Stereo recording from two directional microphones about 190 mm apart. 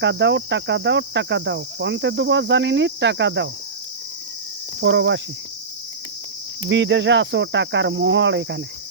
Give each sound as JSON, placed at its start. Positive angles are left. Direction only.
{"t": 0.0, "sound": "cricket", "side_deg": -70}
{"t": 4.8, "sound": "cricket", "side_deg": -65}
{"t": 6.7, "sound": "cricket", "side_deg": -70}